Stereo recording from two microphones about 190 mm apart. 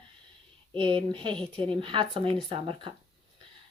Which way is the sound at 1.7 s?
25° right (ahead or behind).